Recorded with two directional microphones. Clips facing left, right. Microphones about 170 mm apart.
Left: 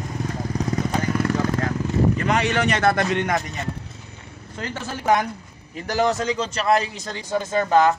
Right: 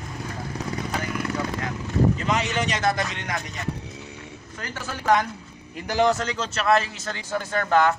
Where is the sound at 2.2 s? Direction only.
60° left (ahead or behind).